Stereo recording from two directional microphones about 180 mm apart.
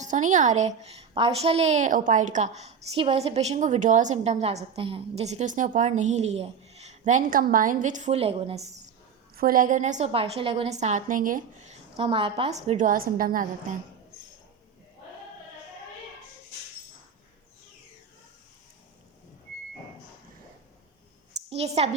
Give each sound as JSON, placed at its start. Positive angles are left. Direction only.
{"t": 0.0, "sound": "a woman's voice", "side_deg": -45}
{"t": 9.3, "sound": "a woman's voice", "side_deg": -55}
{"t": 21.5, "sound": "a woman's voice", "side_deg": -35}